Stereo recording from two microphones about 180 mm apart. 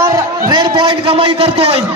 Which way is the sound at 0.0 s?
15° right (ahead or behind).